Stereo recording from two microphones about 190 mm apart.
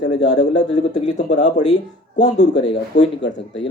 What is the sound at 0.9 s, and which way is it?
Speech, 40° left (ahead or behind).